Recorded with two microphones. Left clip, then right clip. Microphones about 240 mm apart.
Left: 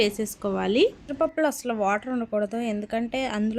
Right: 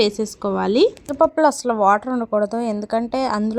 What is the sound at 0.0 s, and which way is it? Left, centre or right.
A woman's voice, centre.